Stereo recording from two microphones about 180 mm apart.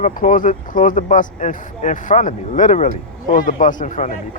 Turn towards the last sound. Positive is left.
turn(degrees=45)  # may be behind; listen again after turning